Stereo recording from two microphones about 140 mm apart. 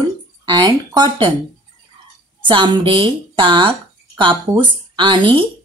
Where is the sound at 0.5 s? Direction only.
35° right (ahead or behind).